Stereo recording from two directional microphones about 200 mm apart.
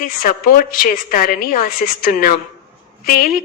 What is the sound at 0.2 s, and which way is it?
A woman's voice, 45° left (ahead or behind).